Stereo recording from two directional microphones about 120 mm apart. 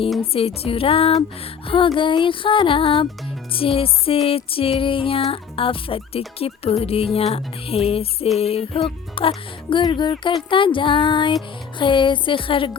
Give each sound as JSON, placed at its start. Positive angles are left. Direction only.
{"t": 0.3, "sound": "music", "side_deg": 55}